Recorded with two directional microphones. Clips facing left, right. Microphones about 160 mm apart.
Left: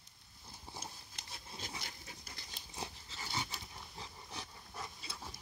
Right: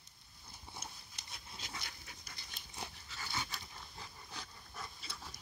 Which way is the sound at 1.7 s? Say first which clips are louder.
Left 1 dB; 25° left (ahead or behind).